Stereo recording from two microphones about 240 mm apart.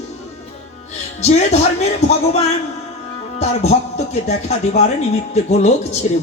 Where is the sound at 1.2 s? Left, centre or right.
Left.